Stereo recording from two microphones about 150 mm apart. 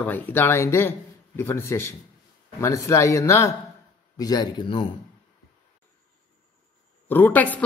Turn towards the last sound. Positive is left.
turn(degrees=10)  # may be behind; listen again after turning